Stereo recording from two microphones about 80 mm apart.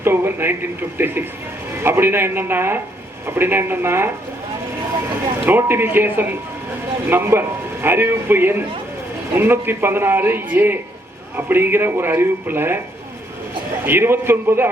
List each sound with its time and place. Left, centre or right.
0.0 s a man's voice: right
5.5 s a man's voice: right
13.8 s a man's voice: right